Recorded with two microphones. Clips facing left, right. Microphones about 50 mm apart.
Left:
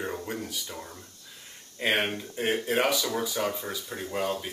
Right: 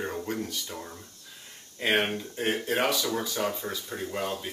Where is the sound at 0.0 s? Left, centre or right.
Centre.